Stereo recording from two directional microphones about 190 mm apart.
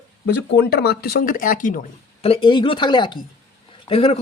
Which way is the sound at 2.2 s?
30° left (ahead or behind).